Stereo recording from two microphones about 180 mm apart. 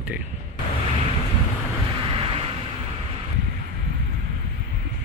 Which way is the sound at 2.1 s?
30° right (ahead or behind).